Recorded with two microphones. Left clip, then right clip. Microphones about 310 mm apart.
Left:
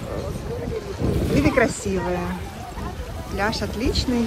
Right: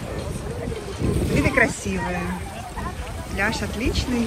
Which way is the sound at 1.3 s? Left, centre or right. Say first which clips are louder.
Even; centre.